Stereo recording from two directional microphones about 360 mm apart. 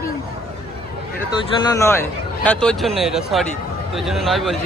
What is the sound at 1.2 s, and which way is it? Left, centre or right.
Speech, centre.